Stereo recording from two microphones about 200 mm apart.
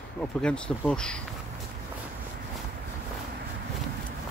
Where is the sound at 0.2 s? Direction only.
5° left (ahead or behind).